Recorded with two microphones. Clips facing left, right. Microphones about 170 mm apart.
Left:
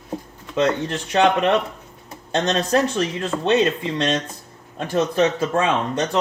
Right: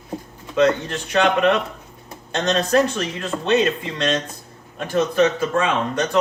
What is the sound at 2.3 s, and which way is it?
Speech, 30° left (ahead or behind).